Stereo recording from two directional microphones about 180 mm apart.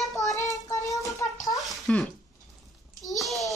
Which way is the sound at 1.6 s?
Centre (ahead or behind).